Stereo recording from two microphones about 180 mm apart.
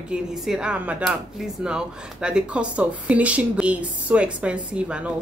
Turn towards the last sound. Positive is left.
turn(degrees=-5)  # may be behind; listen again after turning